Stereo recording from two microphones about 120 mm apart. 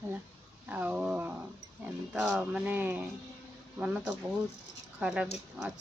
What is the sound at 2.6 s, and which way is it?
Speech, 15° right (ahead or behind).